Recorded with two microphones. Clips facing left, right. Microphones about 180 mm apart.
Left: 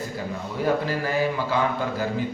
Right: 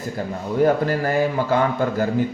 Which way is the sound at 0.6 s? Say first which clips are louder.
Right 6 dB; 50° right (ahead or behind).